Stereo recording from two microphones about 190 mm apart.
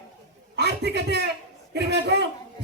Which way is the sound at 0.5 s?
60° right (ahead or behind).